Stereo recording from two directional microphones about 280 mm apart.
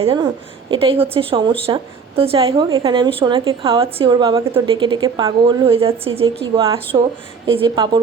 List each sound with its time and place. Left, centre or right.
0.0 s a woman's voice: centre